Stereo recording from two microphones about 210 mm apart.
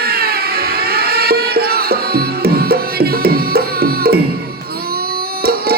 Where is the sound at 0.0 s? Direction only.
45° right (ahead or behind).